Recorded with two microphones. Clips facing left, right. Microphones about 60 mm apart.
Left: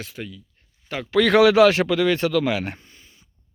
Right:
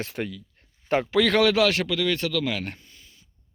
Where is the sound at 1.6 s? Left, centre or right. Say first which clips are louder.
Left 6 dB; left.